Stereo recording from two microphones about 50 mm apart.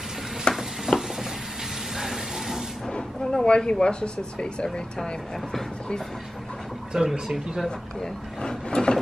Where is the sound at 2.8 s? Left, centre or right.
Centre.